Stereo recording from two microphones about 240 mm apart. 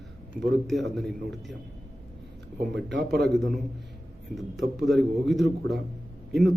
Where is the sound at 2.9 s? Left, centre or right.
Right.